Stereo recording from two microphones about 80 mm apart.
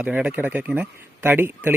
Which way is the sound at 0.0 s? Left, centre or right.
Centre.